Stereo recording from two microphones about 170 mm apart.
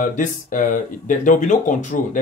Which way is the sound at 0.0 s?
50° left (ahead or behind).